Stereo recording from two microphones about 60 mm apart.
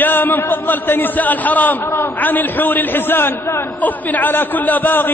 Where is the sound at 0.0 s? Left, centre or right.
Left.